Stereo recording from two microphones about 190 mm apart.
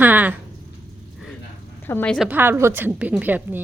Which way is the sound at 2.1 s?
5° right (ahead or behind).